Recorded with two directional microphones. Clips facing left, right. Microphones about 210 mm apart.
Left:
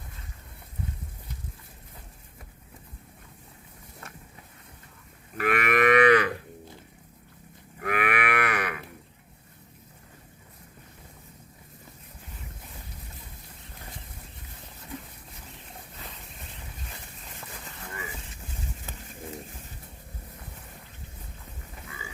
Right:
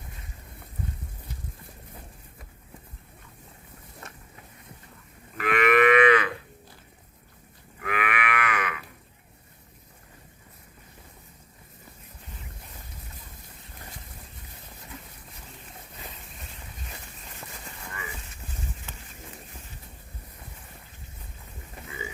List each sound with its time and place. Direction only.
5.4 s livestock: 45° left (ahead or behind)
7.8 s livestock: 40° left (ahead or behind)